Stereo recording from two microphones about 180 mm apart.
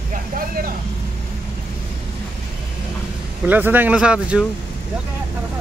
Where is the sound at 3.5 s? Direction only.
10° right (ahead or behind).